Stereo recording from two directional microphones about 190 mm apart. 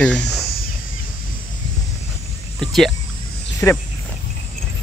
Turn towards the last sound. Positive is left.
turn(degrees=5)  # may be behind; listen again after turning